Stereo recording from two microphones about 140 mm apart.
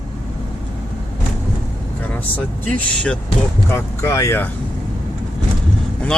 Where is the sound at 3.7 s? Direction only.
20° left (ahead or behind).